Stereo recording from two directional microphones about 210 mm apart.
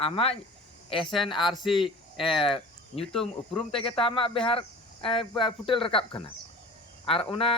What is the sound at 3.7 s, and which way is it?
Speech, 25° left (ahead or behind).